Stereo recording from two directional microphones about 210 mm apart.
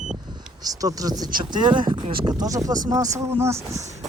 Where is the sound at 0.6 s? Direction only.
15° right (ahead or behind).